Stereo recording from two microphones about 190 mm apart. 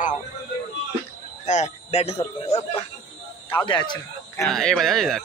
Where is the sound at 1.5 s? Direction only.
35° left (ahead or behind).